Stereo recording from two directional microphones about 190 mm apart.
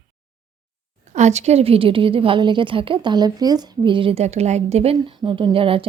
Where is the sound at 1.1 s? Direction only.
35° right (ahead or behind).